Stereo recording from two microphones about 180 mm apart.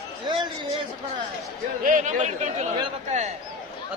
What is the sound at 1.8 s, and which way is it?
Speech, 45° right (ahead or behind).